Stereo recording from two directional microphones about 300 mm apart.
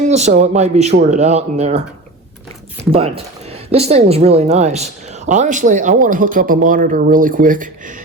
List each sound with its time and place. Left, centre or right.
0.1 s speech: right
3.7 s speech: centre